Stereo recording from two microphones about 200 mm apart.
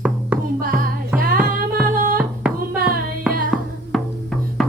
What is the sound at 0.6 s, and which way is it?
Music, 45° right (ahead or behind).